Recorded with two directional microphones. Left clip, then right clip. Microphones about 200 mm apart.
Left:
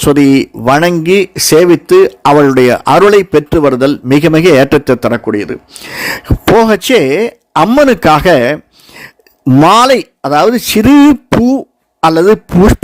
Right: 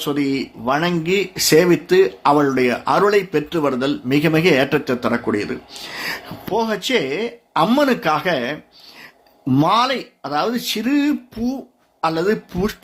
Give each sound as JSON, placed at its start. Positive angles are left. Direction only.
{"t": 0.0, "sound": "speech", "side_deg": 60}
{"t": 5.2, "sound": "speech", "side_deg": 40}
{"t": 9.6, "sound": "speech", "side_deg": 60}